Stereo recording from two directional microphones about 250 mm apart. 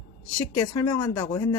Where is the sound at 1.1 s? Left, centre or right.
Centre.